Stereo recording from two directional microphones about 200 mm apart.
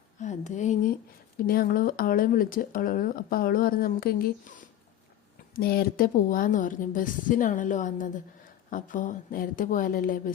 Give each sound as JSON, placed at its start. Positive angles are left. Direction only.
{"t": 0.2, "sound": "a woman's voice", "side_deg": 35}